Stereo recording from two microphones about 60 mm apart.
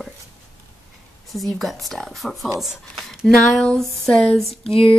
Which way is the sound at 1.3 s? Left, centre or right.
Centre.